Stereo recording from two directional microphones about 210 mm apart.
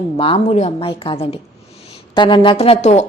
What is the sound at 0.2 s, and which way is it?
A woman's voice, 30° left (ahead or behind).